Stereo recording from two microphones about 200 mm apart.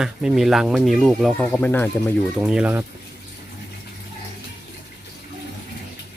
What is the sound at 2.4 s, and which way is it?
Speech, 5° right (ahead or behind).